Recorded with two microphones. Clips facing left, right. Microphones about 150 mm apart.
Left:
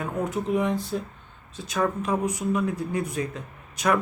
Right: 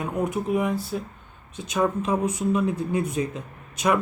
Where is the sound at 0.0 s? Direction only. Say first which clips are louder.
Right 2 dB; 10° right (ahead or behind).